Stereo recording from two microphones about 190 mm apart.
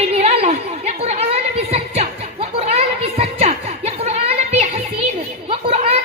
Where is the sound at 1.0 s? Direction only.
30° right (ahead or behind).